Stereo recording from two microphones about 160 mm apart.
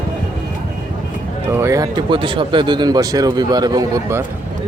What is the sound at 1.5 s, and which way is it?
Speech, 15° right (ahead or behind).